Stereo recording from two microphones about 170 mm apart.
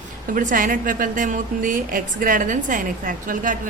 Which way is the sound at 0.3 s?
55° right (ahead or behind).